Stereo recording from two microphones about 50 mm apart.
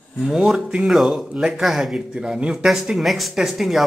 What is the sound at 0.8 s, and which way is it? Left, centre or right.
Speech, centre.